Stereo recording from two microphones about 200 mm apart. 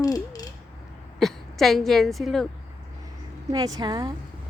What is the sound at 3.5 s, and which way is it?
Speech, 20° right (ahead or behind).